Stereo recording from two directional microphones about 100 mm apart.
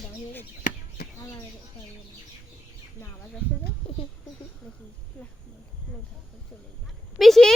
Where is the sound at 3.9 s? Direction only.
65° left (ahead or behind).